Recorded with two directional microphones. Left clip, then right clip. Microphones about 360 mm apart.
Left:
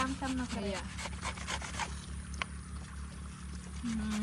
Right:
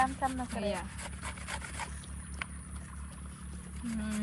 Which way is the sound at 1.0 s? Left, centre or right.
Centre.